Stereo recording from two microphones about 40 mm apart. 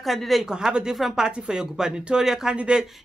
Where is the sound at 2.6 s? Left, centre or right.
Right.